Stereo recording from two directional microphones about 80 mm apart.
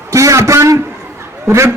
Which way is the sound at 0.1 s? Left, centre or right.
Right.